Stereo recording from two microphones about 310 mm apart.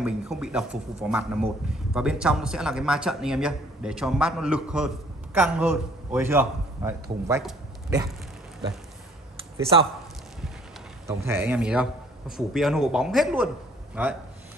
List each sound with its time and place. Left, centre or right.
0.0 s speech: centre
11.1 s speech: centre